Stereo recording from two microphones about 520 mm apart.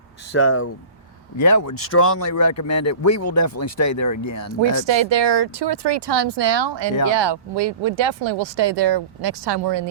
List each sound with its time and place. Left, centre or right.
0.3 s speech: left
1.4 s speech: left
4.9 s speech: right